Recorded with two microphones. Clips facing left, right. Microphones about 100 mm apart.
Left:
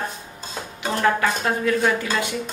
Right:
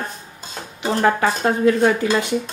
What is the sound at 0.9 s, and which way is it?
Speech, 30° right (ahead or behind).